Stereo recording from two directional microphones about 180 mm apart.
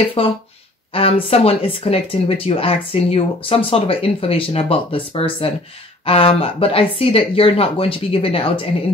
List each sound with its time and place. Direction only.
0.2 s speech: 30° left (ahead or behind)